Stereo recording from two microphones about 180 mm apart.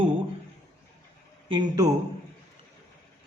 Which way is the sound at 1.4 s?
25° right (ahead or behind).